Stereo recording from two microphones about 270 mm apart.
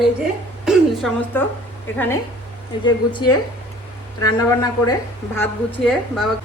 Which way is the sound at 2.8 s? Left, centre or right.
Centre.